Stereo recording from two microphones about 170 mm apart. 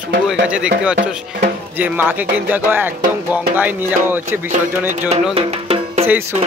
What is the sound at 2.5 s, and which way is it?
Music, 10° right (ahead or behind).